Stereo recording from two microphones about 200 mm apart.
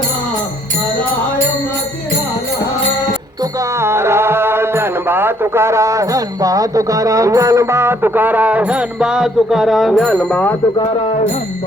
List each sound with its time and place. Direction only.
3.4 s music: 15° right (ahead or behind); by 10.6 s 10° left (ahead or behind)
10.8 s speech: 25° left (ahead or behind)